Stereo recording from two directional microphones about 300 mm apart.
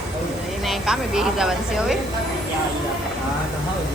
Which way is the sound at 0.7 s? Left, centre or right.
Centre.